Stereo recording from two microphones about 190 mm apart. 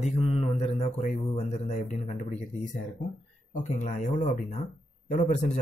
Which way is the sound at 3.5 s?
45° left (ahead or behind).